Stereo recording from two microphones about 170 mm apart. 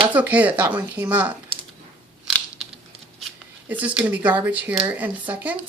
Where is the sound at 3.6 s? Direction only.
10° right (ahead or behind).